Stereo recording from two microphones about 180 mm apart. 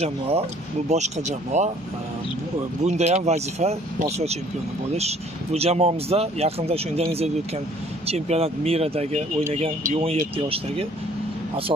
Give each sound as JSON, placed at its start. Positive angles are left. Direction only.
{"t": 0.0, "sound": "speech", "side_deg": -35}
{"t": 2.8, "sound": "speech", "side_deg": -40}
{"t": 4.9, "sound": "speech", "side_deg": -35}